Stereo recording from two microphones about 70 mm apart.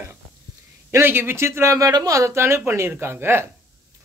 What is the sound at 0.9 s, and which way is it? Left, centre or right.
Speech, right.